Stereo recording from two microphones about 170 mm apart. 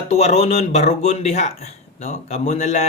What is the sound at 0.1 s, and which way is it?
Speech, 40° left (ahead or behind).